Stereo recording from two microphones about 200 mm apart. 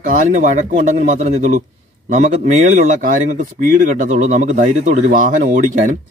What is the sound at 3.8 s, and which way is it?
Speech, 40° right (ahead or behind).